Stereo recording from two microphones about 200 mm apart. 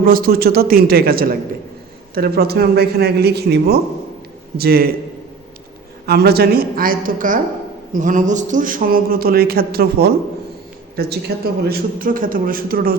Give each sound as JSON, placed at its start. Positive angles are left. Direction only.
{"t": 0.0, "sound": "speech", "side_deg": -45}
{"t": 6.1, "sound": "speech", "side_deg": -50}